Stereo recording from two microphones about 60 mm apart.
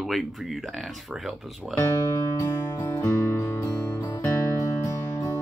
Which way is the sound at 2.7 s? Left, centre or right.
Left.